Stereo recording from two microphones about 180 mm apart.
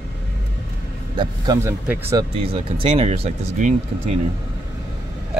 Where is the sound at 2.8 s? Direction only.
30° right (ahead or behind).